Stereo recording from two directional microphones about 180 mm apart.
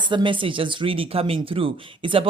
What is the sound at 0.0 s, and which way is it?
Speech, 25° right (ahead or behind).